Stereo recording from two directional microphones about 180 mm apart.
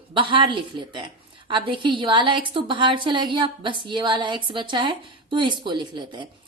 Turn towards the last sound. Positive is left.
turn(degrees=-25)  # may be behind; listen again after turning